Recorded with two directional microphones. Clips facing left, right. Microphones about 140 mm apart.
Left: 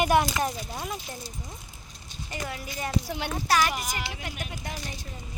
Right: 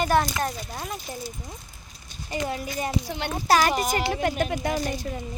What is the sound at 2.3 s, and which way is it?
Speech, 30° right (ahead or behind).